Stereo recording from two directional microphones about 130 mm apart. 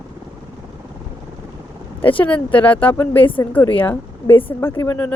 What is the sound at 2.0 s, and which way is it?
Speech, 15° left (ahead or behind).